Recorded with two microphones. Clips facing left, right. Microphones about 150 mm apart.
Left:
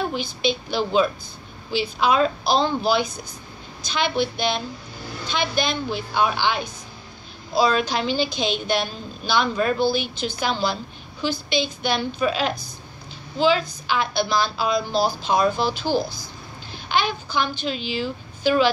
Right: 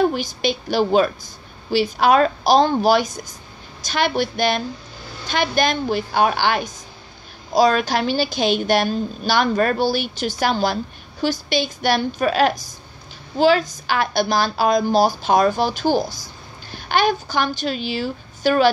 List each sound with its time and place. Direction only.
0.1 s a woman's voice: 50° right (ahead or behind)
11.9 s a woman's voice: 50° right (ahead or behind)